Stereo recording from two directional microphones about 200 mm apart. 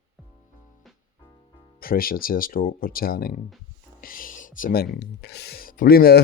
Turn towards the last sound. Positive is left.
turn(degrees=50)  # may be behind; listen again after turning